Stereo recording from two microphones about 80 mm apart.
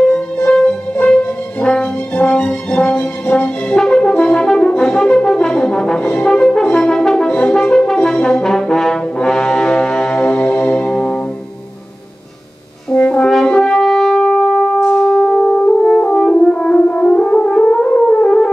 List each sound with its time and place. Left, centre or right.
0.5 s brass instrument: centre
12.9 s french horn: centre